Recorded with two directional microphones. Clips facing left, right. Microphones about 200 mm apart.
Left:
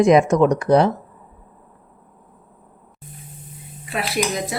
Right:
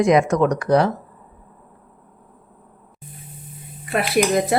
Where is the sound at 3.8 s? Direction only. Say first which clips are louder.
Right 4 dB; 50° right (ahead or behind).